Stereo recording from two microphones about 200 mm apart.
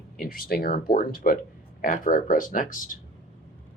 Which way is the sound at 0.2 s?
45° left (ahead or behind).